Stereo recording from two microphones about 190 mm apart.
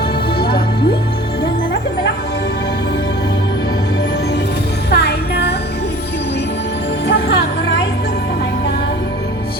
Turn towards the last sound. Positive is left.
turn(degrees=65)  # may be behind; listen again after turning